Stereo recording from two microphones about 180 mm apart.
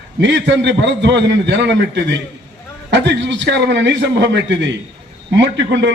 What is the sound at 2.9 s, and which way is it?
A man's voice, 85° right.